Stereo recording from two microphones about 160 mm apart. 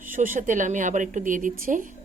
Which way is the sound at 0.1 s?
55° right (ahead or behind).